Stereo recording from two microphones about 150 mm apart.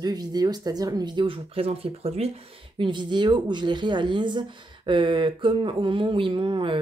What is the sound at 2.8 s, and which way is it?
Speech, 30° right (ahead or behind).